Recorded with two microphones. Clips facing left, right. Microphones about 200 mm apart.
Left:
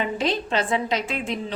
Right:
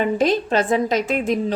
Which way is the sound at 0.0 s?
45° right (ahead or behind).